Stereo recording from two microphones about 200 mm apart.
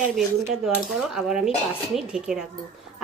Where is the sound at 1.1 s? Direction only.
5° right (ahead or behind).